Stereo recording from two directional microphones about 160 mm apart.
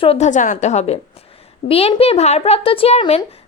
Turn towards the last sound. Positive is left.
turn(degrees=40)  # may be behind; listen again after turning